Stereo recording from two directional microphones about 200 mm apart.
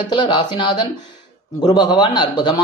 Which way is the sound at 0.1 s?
20° left (ahead or behind).